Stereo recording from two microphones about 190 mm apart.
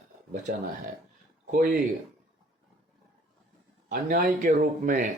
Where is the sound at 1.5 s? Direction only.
45° right (ahead or behind).